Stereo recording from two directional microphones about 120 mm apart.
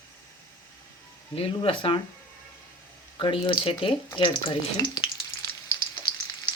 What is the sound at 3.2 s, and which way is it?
Speech, 45° left (ahead or behind).